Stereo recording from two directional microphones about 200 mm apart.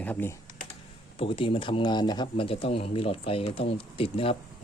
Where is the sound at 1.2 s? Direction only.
25° left (ahead or behind).